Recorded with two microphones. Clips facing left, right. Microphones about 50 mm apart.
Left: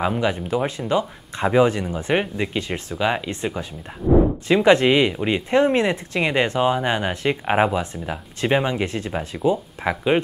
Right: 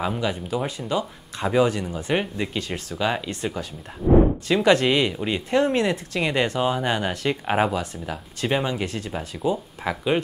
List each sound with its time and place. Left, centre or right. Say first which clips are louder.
0.0 s speech: left 4 dB; centre
2.1 s speech: left 3 dB; centre
4.5 s speech: left 7 dB; left
9.4 s speech: left 4 dB; centre